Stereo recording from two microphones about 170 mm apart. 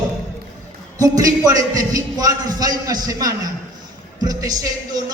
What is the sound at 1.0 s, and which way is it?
A man's voice, 20° right (ahead or behind).